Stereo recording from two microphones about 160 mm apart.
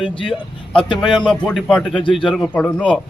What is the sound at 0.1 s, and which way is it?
Speech, 30° left (ahead or behind).